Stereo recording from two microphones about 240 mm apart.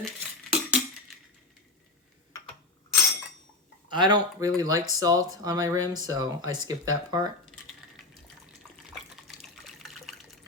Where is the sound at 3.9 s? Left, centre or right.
Centre.